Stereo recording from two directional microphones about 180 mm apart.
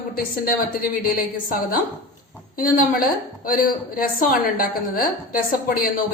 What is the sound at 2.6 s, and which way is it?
A woman's voice, 50° left (ahead or behind).